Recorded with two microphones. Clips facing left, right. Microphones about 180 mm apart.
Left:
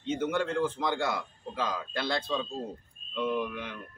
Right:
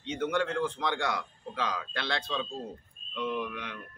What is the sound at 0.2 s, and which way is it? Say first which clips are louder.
A man's voice: right 1 dB; 5° left (ahead or behind).